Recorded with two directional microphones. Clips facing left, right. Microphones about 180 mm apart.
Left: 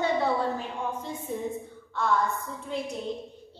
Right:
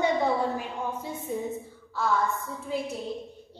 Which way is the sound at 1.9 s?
Centre (ahead or behind).